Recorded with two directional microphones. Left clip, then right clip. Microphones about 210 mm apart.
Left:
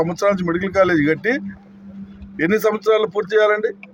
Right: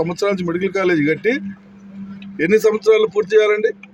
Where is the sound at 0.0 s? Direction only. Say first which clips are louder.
Left 1 dB; 5° left (ahead or behind).